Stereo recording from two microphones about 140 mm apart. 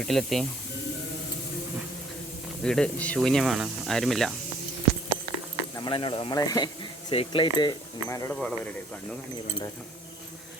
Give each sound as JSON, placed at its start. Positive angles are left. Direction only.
{"t": 0.0, "sound": "speech", "side_deg": 0}
{"t": 2.6, "sound": "speech", "side_deg": 5}
{"t": 5.7, "sound": "speech", "side_deg": 35}
{"t": 7.1, "sound": "speech", "side_deg": 40}
{"t": 8.3, "sound": "speech", "side_deg": 5}